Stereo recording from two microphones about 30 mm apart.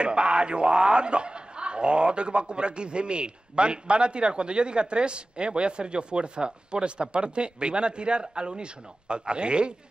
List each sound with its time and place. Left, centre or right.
0.0 s a man's voice: right